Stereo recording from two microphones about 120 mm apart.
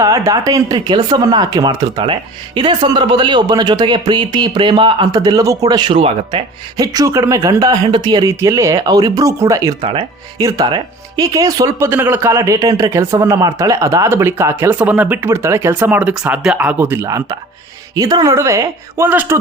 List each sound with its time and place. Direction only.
0.0 s speech: 30° right (ahead or behind)
5.9 s speech: 50° right (ahead or behind)
6.7 s speech: 30° right (ahead or behind)
9.8 s speech: 45° right (ahead or behind)
10.4 s speech: 35° right (ahead or behind)
11.9 s speech: 15° right (ahead or behind)